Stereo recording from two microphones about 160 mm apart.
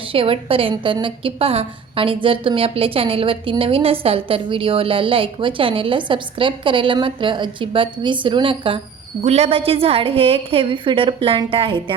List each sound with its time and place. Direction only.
0.1 s a woman's voice: 35° right (ahead or behind)